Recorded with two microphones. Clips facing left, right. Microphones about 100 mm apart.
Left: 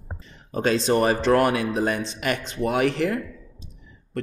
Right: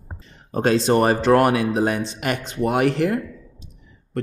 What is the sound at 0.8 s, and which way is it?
Speech, 45° right (ahead or behind).